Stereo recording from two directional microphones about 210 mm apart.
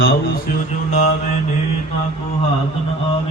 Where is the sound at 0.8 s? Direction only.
30° left (ahead or behind).